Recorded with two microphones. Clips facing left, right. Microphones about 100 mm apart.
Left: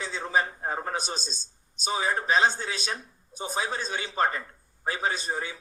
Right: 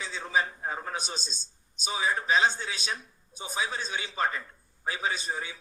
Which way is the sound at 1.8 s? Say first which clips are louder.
Left 2 dB; 45° left (ahead or behind).